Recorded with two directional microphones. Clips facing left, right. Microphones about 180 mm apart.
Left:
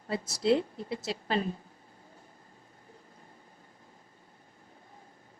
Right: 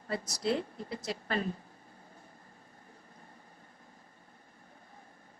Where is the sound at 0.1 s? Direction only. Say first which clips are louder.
Left 5 dB; 25° left (ahead or behind).